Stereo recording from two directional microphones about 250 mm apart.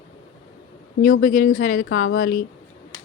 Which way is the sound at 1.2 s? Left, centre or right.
Left.